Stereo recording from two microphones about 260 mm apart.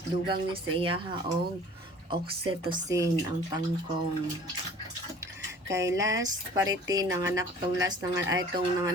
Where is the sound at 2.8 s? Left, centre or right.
Centre.